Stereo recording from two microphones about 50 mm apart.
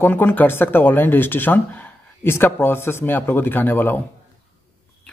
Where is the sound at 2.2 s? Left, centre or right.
Left.